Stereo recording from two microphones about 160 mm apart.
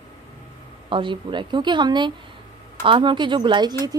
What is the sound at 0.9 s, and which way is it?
Speech, 30° right (ahead or behind).